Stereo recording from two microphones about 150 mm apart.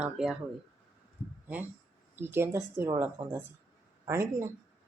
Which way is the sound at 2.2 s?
15° right (ahead or behind).